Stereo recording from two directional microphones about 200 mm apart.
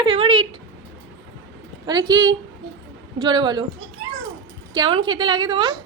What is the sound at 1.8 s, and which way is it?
Speech, 20° right (ahead or behind).